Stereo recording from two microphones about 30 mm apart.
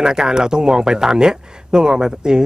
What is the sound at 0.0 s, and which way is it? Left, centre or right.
A man's voice, right.